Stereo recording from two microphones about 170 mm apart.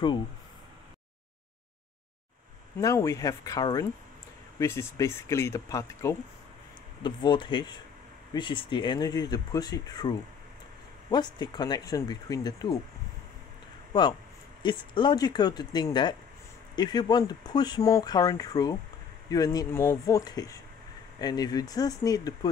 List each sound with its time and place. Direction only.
2.8 s speech: 20° left (ahead or behind)
14.6 s speech: 25° left (ahead or behind)